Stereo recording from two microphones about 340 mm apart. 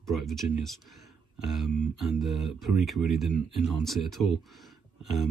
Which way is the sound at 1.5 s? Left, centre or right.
Centre.